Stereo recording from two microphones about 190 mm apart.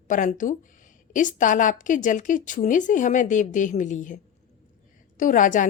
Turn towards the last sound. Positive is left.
turn(degrees=45)  # may be behind; listen again after turning